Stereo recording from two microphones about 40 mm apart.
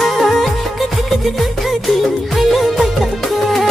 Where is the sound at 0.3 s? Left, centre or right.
Centre.